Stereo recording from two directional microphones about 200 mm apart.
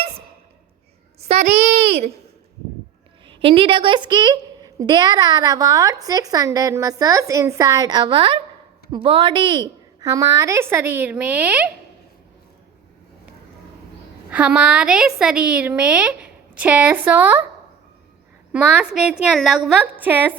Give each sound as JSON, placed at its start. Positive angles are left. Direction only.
{"t": 1.3, "sound": "a child's voice", "side_deg": -30}
{"t": 3.2, "sound": "a woman's voice", "side_deg": -25}
{"t": 14.3, "sound": "a woman's voice", "side_deg": -5}
{"t": 18.5, "sound": "a woman's voice", "side_deg": -5}